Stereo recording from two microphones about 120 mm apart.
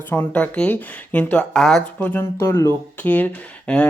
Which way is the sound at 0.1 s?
15° left (ahead or behind).